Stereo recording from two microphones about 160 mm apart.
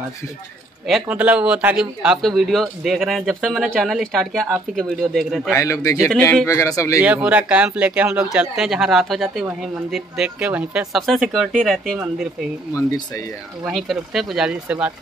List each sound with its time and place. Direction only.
0.8 s a man's voice: 5° right (ahead or behind)
5.5 s speech: 20° left (ahead or behind)
7.0 s a man's voice: 10° right (ahead or behind)
13.7 s a man's voice: centre (ahead or behind)